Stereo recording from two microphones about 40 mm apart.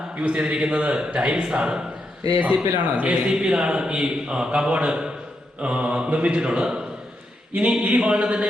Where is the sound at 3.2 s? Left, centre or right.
Right.